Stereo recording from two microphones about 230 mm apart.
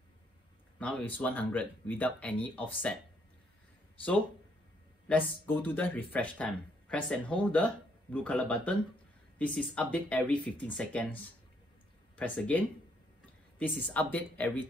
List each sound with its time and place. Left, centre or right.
0.7 s speech: centre
5.0 s speech: centre
12.2 s speech: centre